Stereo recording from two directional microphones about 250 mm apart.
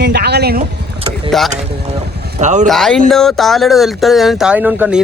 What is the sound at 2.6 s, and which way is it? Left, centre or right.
Speech, centre.